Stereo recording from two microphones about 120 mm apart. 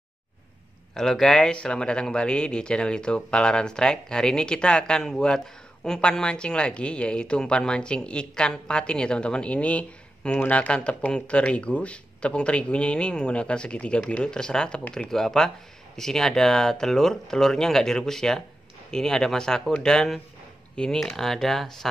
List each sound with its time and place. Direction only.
0.9 s speech: 5° left (ahead or behind)